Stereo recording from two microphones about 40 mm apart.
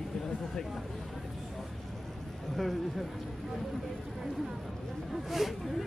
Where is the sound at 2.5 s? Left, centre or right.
Centre.